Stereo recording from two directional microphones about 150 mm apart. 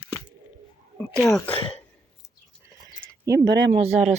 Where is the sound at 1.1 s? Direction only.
5° left (ahead or behind).